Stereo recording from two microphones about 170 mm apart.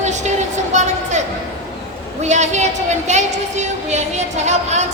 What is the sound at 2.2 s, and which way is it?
A woman's voice, 40° right (ahead or behind).